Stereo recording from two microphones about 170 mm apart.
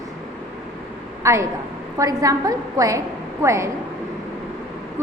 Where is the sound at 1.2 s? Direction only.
15° right (ahead or behind).